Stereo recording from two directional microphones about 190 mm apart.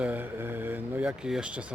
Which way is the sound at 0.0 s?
10° right (ahead or behind).